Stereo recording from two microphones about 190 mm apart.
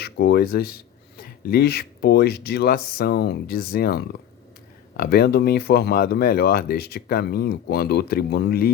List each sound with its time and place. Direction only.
0.0 s speech: 60° left (ahead or behind)